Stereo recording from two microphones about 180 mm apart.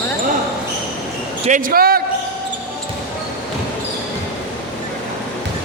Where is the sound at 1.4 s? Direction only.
45° right (ahead or behind).